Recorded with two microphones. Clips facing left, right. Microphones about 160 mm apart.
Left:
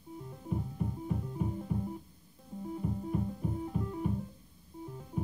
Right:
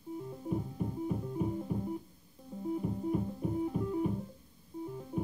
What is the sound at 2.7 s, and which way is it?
Music, 5° right (ahead or behind).